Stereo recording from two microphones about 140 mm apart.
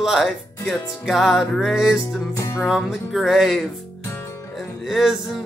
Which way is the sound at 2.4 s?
25° left (ahead or behind).